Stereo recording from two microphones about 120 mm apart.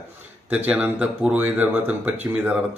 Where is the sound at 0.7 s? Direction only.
10° right (ahead or behind).